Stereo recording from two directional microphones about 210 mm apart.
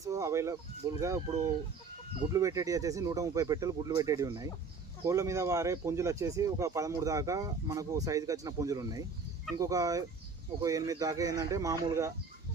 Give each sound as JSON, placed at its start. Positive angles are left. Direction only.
{"t": 0.0, "sound": "speech", "side_deg": -15}